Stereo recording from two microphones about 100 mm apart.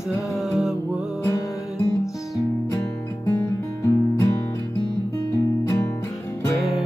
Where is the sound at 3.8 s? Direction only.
30° left (ahead or behind).